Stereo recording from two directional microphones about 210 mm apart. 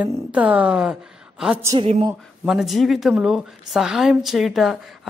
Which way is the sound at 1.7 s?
30° right (ahead or behind).